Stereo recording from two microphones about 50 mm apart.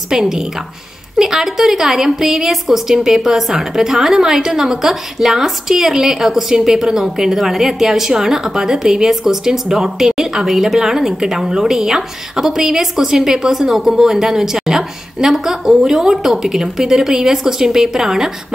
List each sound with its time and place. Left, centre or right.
0.1 s a woman's voice: centre